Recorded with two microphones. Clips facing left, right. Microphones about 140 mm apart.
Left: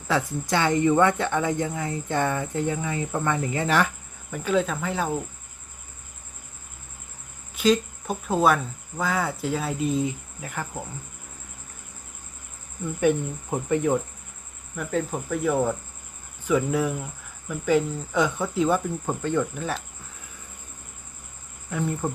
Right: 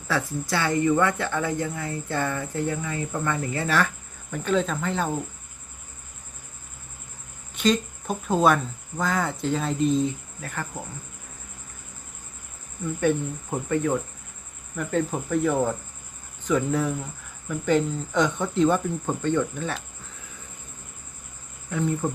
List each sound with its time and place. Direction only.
0.1 s speech: 20° left (ahead or behind)
7.5 s speech: 5° left (ahead or behind)
13.0 s speech: 15° left (ahead or behind)
14.8 s speech: centre (ahead or behind)
21.7 s speech: 5° left (ahead or behind)